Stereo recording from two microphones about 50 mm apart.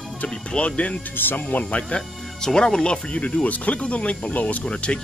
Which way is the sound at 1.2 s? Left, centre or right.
Left.